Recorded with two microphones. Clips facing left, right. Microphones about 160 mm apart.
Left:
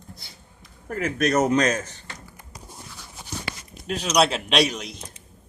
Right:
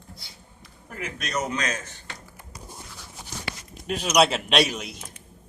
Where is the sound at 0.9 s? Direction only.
55° left (ahead or behind).